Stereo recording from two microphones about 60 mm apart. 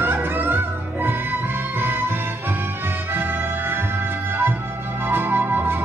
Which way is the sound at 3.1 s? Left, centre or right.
Right.